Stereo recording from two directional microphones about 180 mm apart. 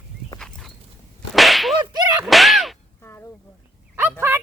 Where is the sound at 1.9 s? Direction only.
20° right (ahead or behind).